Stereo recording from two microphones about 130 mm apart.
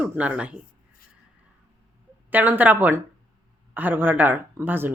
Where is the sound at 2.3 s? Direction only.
15° right (ahead or behind).